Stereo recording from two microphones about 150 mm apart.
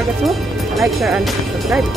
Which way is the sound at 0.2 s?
Centre (ahead or behind).